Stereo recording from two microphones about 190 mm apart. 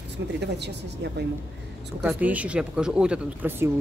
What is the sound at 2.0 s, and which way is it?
Speech, 10° right (ahead or behind).